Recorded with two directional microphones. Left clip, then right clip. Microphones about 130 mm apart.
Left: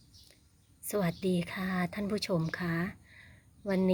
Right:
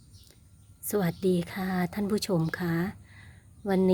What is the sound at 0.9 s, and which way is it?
A woman's voice, 40° right (ahead or behind).